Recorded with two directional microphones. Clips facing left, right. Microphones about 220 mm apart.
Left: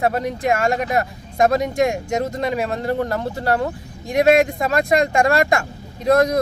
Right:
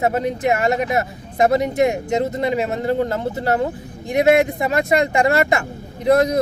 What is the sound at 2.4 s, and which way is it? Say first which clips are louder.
Speech: right 2 dB; 20° right (ahead or behind).